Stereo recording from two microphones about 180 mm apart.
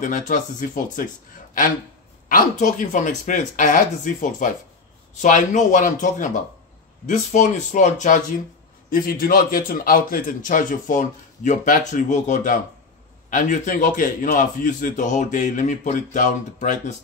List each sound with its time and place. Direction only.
0.3 s a man's voice: 45° left (ahead or behind)
8.9 s a man's voice: 55° left (ahead or behind)